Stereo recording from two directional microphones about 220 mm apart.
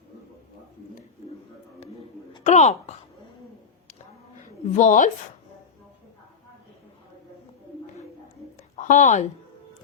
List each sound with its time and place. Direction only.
2.3 s speech: 30° left (ahead or behind)
4.4 s speech: 35° left (ahead or behind)
8.7 s speech: 35° left (ahead or behind)